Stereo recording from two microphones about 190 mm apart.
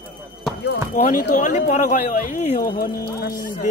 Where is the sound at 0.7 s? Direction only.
50° left (ahead or behind).